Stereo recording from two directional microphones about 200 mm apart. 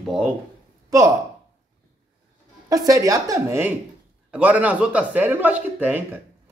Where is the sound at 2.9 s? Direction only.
15° right (ahead or behind).